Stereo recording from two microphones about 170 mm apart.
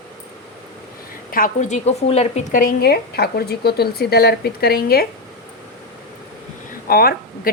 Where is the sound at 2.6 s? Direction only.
70° left (ahead or behind).